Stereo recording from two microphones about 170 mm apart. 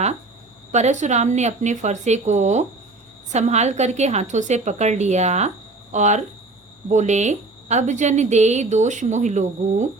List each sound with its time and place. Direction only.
0.7 s a woman's voice: 45° right (ahead or behind)